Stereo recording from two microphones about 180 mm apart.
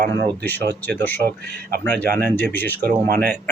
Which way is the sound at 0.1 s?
10° left (ahead or behind).